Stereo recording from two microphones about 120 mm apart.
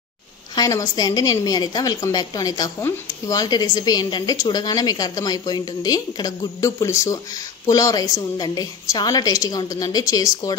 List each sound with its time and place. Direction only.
0.6 s a woman's voice: 30° left (ahead or behind)